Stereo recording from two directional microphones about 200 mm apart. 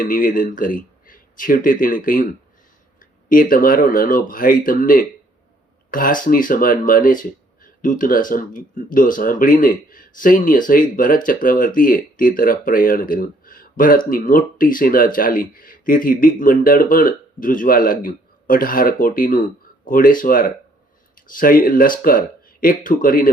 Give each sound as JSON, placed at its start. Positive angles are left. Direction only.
{"t": 0.0, "sound": "speech", "side_deg": 45}